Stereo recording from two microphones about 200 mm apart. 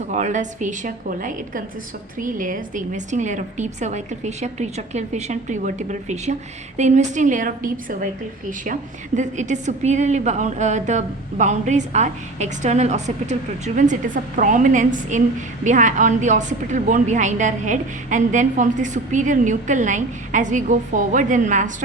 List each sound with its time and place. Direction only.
0.1 s a woman's voice: 35° right (ahead or behind)